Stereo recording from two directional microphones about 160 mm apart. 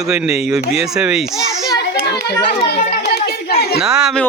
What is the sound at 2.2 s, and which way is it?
Speech, 90° left.